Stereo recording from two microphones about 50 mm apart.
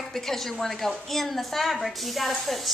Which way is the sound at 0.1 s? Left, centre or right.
Centre.